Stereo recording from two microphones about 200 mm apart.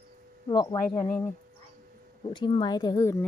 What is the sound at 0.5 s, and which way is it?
Speech, 20° left (ahead or behind).